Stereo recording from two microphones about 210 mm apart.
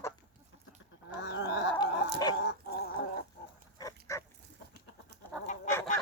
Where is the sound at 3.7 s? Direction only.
15° left (ahead or behind).